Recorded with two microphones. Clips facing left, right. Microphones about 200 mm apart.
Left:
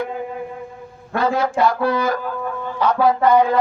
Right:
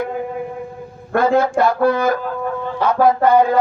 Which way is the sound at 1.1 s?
50° right (ahead or behind).